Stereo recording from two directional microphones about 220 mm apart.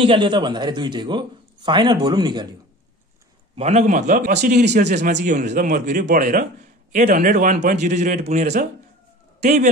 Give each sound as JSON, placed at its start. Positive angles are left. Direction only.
{"t": 0.0, "sound": "a man's voice", "side_deg": -20}
{"t": 3.5, "sound": "a man's voice", "side_deg": -30}